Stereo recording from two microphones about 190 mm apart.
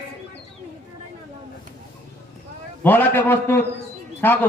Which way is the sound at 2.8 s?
10° left (ahead or behind).